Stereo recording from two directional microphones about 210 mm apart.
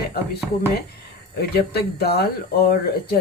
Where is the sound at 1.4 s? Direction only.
50° left (ahead or behind).